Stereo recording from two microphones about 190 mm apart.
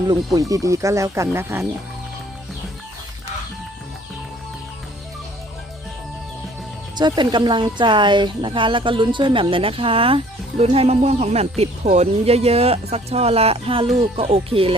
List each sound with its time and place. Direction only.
0.3 s speech: 15° right (ahead or behind)
6.9 s speech: 25° right (ahead or behind)